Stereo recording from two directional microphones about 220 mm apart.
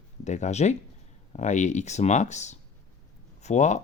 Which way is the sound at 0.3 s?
30° left (ahead or behind).